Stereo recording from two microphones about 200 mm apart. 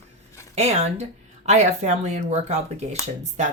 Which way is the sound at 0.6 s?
30° right (ahead or behind).